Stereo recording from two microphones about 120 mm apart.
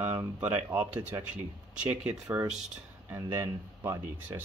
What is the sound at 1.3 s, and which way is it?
Speech, 10° right (ahead or behind).